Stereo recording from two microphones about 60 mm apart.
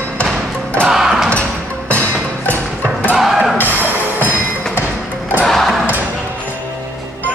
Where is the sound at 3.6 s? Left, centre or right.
Right.